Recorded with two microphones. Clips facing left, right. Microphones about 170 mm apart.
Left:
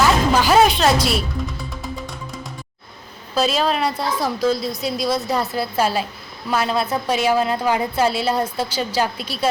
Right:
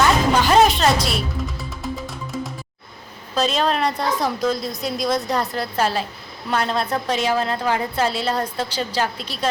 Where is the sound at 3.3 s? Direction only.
5° left (ahead or behind).